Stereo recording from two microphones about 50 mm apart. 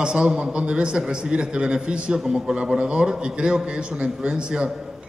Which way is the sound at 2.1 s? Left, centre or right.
Centre.